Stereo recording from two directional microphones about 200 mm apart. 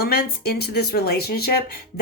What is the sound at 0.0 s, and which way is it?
Speech, 50° left (ahead or behind).